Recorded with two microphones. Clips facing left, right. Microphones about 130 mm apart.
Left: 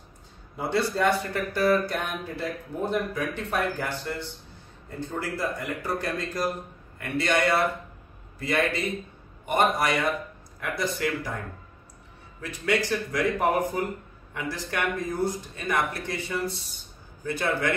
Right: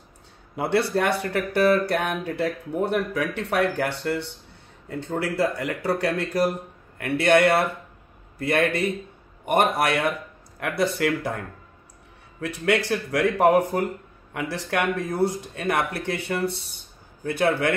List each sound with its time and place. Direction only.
0.6 s speech: 65° right (ahead or behind)
12.4 s speech: 65° right (ahead or behind)